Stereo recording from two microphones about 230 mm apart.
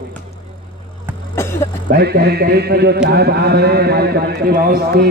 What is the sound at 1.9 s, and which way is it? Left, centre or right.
A man's voice, right.